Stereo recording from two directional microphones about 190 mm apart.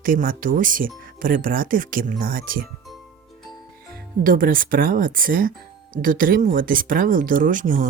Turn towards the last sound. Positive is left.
turn(degrees=-45)  # may be behind; listen again after turning